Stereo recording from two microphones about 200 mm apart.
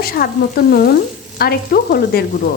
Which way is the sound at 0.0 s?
50° left (ahead or behind).